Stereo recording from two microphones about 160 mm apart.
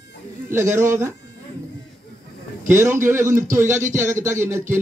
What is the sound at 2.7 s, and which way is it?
A man's voice, 15° right (ahead or behind).